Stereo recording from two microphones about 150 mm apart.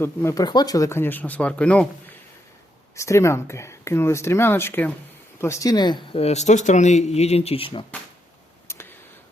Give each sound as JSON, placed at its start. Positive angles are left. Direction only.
{"t": 0.0, "sound": "speech", "side_deg": 20}
{"t": 2.9, "sound": "speech", "side_deg": 20}
{"t": 6.1, "sound": "speech", "side_deg": 45}
{"t": 8.6, "sound": "tick", "side_deg": 15}